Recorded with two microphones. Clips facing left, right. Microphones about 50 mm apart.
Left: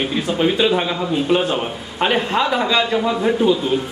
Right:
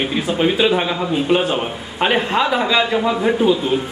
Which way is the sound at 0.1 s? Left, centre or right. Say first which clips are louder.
Right 1 dB; centre.